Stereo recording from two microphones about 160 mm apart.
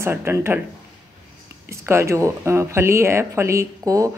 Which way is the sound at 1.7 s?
15° right (ahead or behind).